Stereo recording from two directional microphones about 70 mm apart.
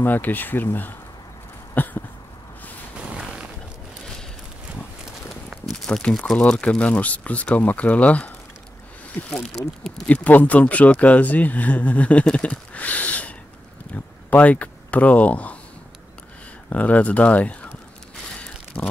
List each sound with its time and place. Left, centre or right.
0.0 s speech: left
1.8 s a sound: left
5.7 s a sound: centre
6.0 s speech: centre
9.6 s speech: centre
10.0 s speech: left
16.6 s speech: left
18.8 s speech: left